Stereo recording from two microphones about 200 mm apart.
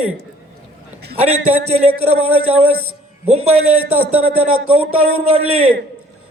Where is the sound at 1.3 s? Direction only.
90° right.